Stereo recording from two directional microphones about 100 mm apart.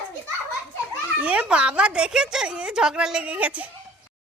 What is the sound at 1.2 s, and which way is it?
Speech, 10° right (ahead or behind).